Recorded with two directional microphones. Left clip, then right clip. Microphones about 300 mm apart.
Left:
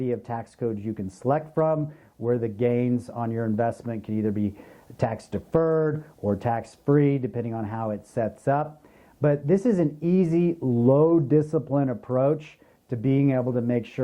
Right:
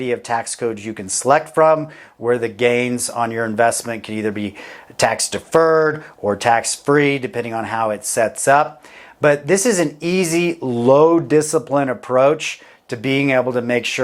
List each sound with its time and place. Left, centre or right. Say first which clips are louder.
0.0 s speech: right 9 dB; centre
5.6 s speech: right 9 dB; centre
10.6 s speech: right 5 dB; right
10.8 s speech: right 8 dB; centre